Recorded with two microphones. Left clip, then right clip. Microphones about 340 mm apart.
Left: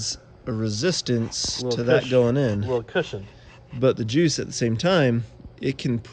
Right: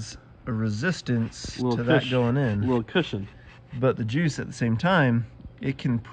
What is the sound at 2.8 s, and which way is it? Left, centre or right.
Speech, centre.